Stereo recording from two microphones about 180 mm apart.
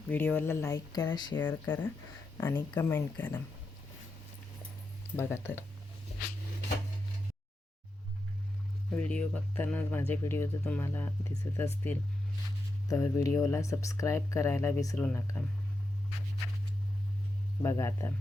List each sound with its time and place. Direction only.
0.1 s speech: 10° left (ahead or behind)
1.4 s speech: 10° left (ahead or behind)
5.1 s speech: 15° left (ahead or behind)
8.9 s speech: 5° left (ahead or behind)
17.6 s speech: 15° left (ahead or behind)